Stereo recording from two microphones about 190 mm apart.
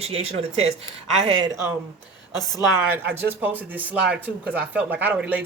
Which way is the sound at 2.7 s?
10° right (ahead or behind).